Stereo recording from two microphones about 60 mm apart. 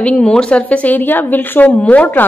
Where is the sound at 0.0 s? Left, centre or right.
Centre.